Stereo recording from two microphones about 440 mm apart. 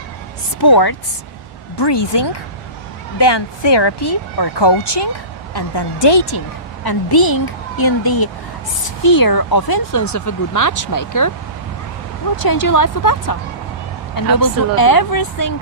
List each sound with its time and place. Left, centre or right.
0.6 s speech: left
1.7 s speech: left
6.8 s speech: left
12.4 s speech: left